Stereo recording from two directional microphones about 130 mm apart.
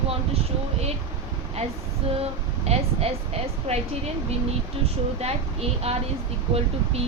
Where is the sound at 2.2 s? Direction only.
50° right (ahead or behind).